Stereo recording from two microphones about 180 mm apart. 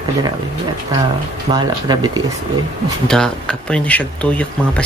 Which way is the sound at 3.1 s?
5° left (ahead or behind).